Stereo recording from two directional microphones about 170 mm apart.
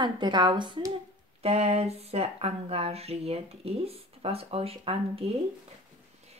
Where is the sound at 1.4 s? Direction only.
35° right (ahead or behind).